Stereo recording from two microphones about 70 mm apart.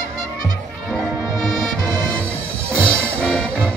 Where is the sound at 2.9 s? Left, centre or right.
Centre.